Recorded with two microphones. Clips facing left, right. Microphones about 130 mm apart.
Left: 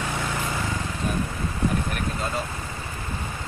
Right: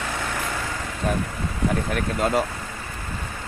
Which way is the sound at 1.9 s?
70° right (ahead or behind).